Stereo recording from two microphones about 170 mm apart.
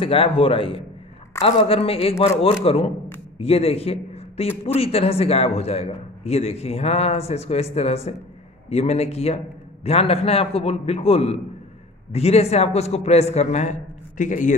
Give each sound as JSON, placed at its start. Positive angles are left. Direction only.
{"t": 0.0, "sound": "a man's voice", "side_deg": 35}